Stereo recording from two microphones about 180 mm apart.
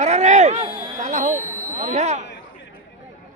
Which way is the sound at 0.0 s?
40° right (ahead or behind).